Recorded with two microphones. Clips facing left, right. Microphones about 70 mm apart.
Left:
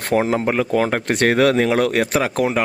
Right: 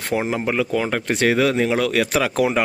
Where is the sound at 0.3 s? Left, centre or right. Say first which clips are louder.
Left 3 dB; left.